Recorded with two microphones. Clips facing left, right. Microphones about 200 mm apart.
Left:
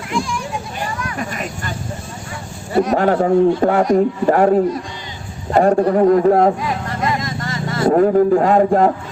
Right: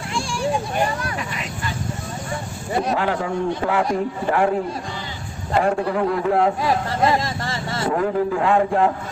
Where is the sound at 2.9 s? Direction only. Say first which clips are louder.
Left 8 dB; 40° left (ahead or behind).